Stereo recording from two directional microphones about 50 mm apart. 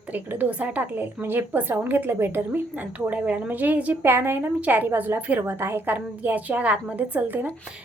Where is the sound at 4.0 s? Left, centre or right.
Right.